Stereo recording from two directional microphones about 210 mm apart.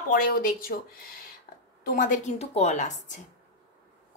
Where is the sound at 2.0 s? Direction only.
35° left (ahead or behind).